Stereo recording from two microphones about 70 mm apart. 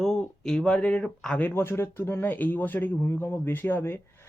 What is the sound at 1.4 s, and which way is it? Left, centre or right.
Speech, left.